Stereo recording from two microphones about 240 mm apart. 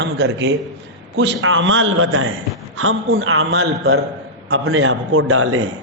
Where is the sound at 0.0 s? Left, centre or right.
Right.